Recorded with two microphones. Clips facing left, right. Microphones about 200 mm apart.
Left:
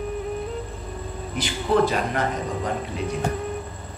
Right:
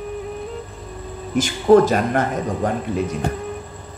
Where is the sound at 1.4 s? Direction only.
45° right (ahead or behind).